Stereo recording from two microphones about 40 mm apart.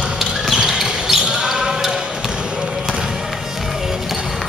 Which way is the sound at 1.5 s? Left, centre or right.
Centre.